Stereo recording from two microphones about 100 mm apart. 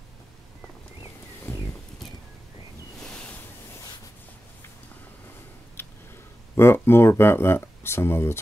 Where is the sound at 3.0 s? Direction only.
10° left (ahead or behind).